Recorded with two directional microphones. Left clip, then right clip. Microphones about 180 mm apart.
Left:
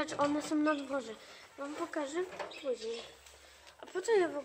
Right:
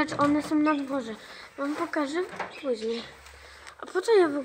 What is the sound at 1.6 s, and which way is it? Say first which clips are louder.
Speech: right 9 dB; 35° right (ahead or behind).